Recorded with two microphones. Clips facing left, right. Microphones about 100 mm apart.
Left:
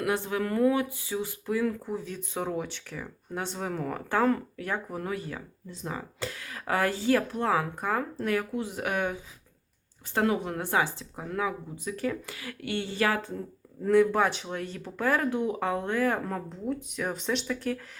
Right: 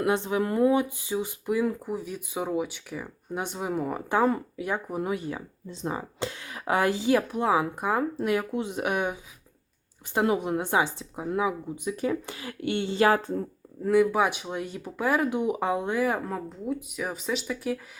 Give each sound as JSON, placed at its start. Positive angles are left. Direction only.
{"t": 0.0, "sound": "speech", "side_deg": -20}
{"t": 10.2, "sound": "a woman's voice", "side_deg": -20}
{"t": 13.8, "sound": "speech", "side_deg": -5}